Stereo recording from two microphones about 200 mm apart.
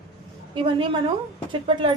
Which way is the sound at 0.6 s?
25° right (ahead or behind).